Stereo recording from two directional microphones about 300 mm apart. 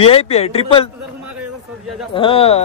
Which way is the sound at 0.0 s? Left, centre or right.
Centre.